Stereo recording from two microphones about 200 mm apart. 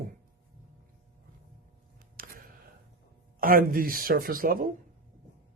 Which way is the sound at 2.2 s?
45° right (ahead or behind).